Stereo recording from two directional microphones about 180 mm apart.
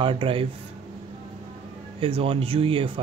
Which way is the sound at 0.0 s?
30° right (ahead or behind).